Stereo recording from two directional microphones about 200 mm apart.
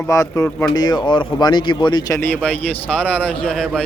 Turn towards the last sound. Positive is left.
turn(degrees=0)  # may be behind; listen again after turning